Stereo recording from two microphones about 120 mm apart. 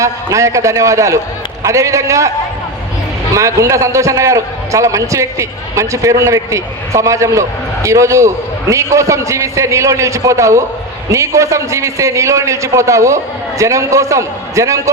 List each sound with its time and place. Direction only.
0.0 s a man's voice: 25° right (ahead or behind)
3.3 s a man's voice: 25° right (ahead or behind)